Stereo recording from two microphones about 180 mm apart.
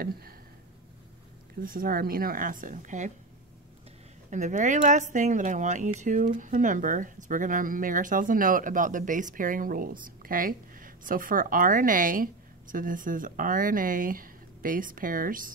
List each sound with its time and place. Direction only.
0.0 s a sound: 55° right (ahead or behind)
1.6 s speech: 50° right (ahead or behind)
4.3 s speech: 40° right (ahead or behind)